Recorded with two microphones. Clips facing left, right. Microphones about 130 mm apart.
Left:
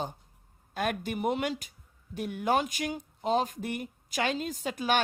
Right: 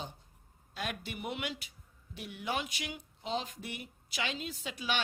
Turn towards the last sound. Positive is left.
turn(degrees=50)  # may be behind; listen again after turning